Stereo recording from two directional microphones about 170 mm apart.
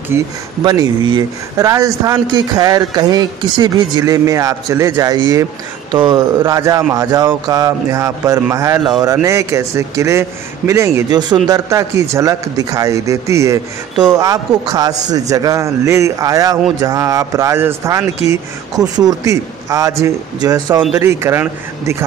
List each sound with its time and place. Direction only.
0.1 s a man's voice: 15° right (ahead or behind)